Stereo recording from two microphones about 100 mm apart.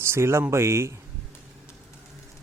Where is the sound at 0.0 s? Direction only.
25° right (ahead or behind).